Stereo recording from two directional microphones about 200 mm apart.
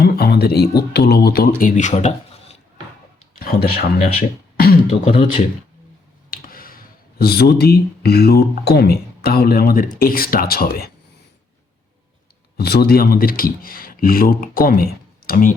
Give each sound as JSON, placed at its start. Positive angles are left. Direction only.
{"t": 0.0, "sound": "speech", "side_deg": 50}
{"t": 3.3, "sound": "speech", "side_deg": 50}
{"t": 4.9, "sound": "speech", "side_deg": 30}
{"t": 6.3, "sound": "speech", "side_deg": 45}
{"t": 12.5, "sound": "speech", "side_deg": 50}